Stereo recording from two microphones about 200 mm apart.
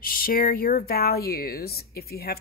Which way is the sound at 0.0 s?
45° left (ahead or behind).